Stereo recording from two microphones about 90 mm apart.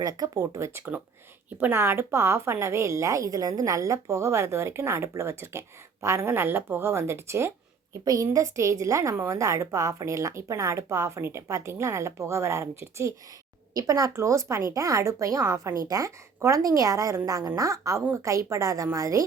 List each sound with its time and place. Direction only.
0.0 s a woman's voice: 40° right (ahead or behind)
0.7 s a woman's voice: 25° right (ahead or behind)
8.0 s a woman's voice: 40° right (ahead or behind)